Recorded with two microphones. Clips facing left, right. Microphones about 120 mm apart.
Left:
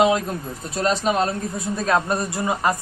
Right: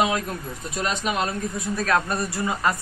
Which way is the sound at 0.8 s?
35° left (ahead or behind).